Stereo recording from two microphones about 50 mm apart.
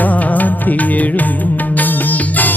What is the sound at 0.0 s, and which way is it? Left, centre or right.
Music, left.